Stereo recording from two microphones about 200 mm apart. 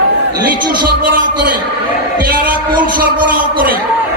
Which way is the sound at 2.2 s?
45° right (ahead or behind).